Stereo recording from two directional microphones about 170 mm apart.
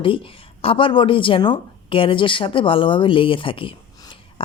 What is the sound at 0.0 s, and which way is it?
Speech, 30° left (ahead or behind).